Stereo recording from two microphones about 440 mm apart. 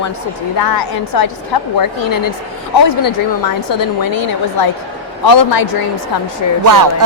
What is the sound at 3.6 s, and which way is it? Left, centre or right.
A woman's voice, left.